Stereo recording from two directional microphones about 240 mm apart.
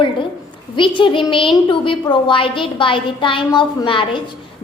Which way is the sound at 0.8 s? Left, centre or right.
Left.